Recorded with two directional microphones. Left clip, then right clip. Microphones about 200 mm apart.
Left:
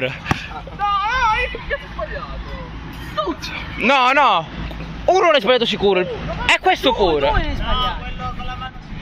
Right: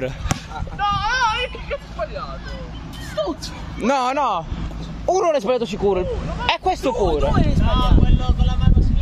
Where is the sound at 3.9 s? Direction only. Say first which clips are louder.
Left 5 dB; 20° right (ahead or behind).